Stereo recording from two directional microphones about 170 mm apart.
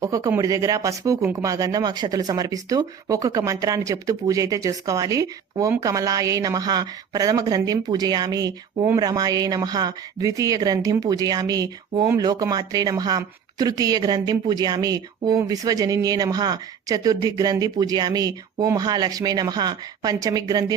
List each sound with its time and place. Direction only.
0.0 s a woman's voice: 20° right (ahead or behind)